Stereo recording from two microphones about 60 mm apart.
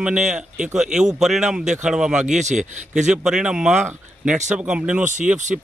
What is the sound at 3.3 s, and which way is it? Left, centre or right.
Speech, centre.